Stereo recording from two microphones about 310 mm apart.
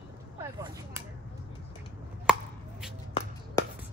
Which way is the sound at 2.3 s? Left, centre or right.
Centre.